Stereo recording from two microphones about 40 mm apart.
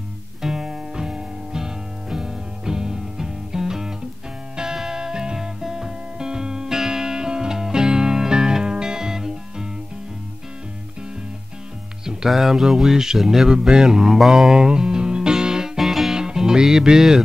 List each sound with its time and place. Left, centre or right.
0.4 s music: centre
12.0 s music: centre
12.3 s speech: centre
13.6 s speech: centre
14.3 s music: centre
16.2 s music: centre